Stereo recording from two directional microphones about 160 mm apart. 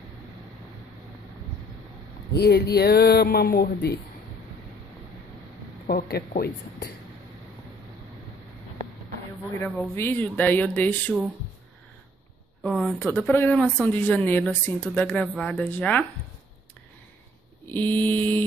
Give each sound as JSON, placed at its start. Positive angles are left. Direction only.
{"t": 2.3, "sound": "speech", "side_deg": 85}
{"t": 5.9, "sound": "speech", "side_deg": 75}
{"t": 9.6, "sound": "speech", "side_deg": 15}
{"t": 12.6, "sound": "speech", "side_deg": 5}
{"t": 17.6, "sound": "speech", "side_deg": 10}